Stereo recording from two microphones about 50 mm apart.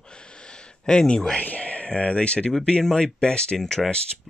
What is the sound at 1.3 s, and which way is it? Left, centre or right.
Speech, left.